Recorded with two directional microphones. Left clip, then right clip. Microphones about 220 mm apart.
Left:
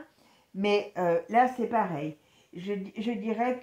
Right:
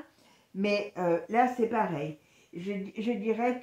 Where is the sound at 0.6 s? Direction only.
40° left (ahead or behind).